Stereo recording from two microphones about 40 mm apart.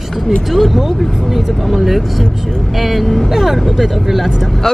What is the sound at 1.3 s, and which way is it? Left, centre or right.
Speech, centre.